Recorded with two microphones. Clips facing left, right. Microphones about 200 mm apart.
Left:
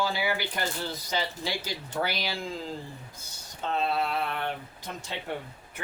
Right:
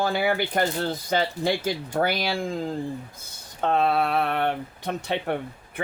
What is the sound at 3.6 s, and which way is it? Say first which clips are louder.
Speech: right 6 dB; 60° right (ahead or behind).